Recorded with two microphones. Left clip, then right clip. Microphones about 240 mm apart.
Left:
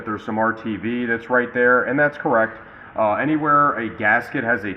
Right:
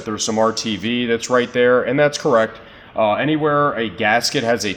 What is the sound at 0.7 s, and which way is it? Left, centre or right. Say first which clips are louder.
Speech: right 3 dB; right.